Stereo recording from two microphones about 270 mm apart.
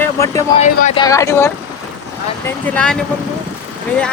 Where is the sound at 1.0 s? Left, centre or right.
Centre.